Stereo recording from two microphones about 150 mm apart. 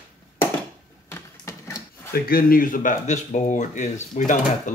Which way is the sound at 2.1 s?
75° left (ahead or behind).